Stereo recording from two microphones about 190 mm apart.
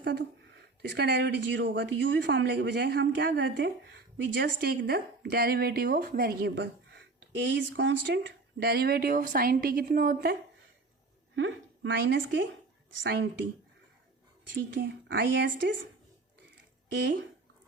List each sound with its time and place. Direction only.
0.0 s speech: 65° right (ahead or behind)
7.3 s speech: 70° right (ahead or behind); by 10.3 s 50° right (ahead or behind)
11.3 s speech: 75° right (ahead or behind)
14.8 s speech: 70° right (ahead or behind)
17.0 s speech: 65° right (ahead or behind)